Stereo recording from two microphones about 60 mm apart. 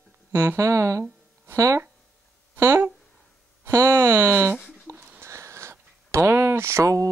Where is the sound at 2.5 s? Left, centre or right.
Right.